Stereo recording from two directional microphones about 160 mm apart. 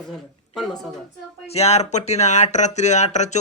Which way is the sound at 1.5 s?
40° left (ahead or behind).